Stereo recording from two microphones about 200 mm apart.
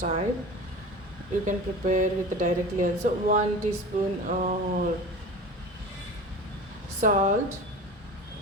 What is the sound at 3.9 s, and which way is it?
Speech, 35° right (ahead or behind).